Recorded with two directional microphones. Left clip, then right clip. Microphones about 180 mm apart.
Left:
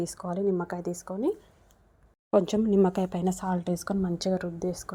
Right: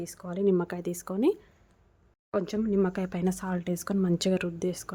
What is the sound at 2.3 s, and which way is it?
A woman's voice, 15° left (ahead or behind).